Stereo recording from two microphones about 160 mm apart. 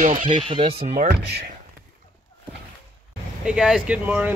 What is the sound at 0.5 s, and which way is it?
Speech, 35° right (ahead or behind).